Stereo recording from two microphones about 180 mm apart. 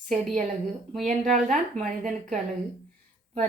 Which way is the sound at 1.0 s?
45° right (ahead or behind).